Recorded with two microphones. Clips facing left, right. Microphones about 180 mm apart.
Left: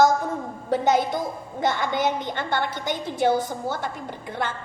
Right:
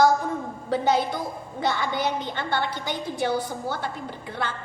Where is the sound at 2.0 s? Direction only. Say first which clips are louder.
Left 2 dB; 20° left (ahead or behind).